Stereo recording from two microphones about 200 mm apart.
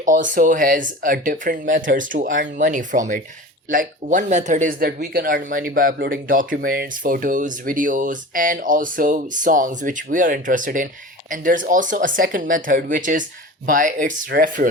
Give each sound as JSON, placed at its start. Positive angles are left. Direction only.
{"t": 0.0, "sound": "speech", "side_deg": -40}